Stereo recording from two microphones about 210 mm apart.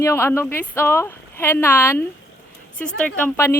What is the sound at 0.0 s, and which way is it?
Speech, 10° left (ahead or behind).